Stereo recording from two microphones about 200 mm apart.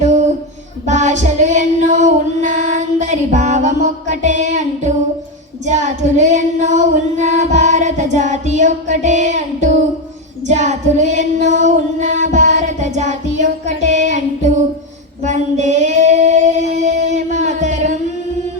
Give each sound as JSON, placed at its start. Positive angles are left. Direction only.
{"t": 0.9, "sound": "female singing", "side_deg": -35}